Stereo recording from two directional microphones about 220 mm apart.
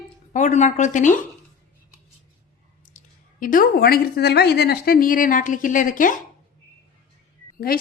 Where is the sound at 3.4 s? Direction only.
40° left (ahead or behind).